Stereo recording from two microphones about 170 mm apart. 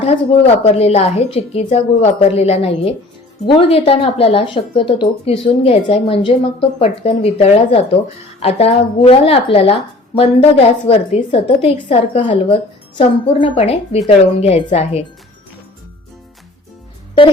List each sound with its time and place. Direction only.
0.0 s a woman's voice: 35° left (ahead or behind)